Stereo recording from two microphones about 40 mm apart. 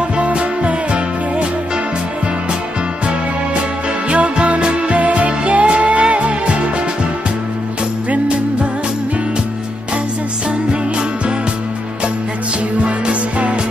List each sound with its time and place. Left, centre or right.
0.2 s music: right
4.1 s music: right
10.7 s music: right
12.8 s music: right